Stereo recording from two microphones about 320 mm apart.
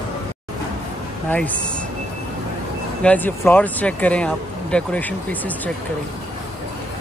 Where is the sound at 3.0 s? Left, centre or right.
Centre.